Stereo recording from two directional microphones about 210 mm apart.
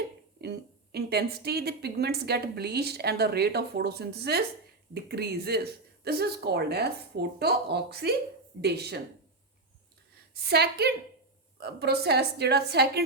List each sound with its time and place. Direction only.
0.4 s speech: 50° right (ahead or behind)
10.4 s speech: 50° right (ahead or behind)